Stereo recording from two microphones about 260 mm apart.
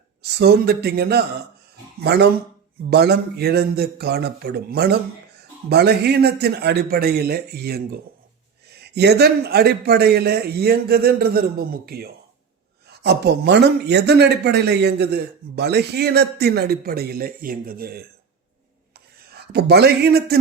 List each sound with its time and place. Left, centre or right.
0.2 s speech: right
19.5 s speech: right